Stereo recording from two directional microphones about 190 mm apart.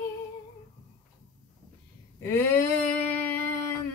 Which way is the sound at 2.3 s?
10° left (ahead or behind).